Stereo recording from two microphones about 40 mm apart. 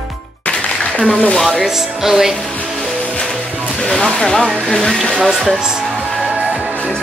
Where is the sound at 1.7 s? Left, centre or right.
Centre.